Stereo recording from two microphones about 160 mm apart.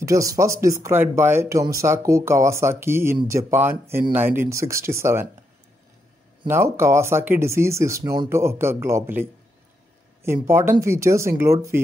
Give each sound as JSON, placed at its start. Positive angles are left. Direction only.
{"t": 0.0, "sound": "speech", "side_deg": -20}
{"t": 6.4, "sound": "speech", "side_deg": -15}